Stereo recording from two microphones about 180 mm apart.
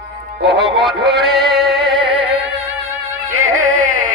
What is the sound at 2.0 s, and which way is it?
Music, 75° right (ahead or behind).